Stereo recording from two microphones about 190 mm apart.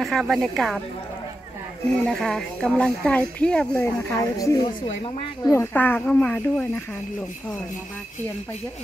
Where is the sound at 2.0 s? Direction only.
Centre (ahead or behind).